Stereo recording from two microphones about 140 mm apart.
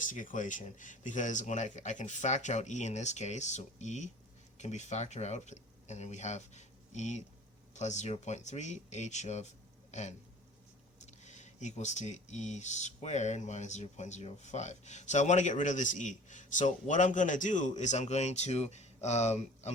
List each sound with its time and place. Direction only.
0.0 s speech: 70° left (ahead or behind); by 19.7 s 50° left (ahead or behind)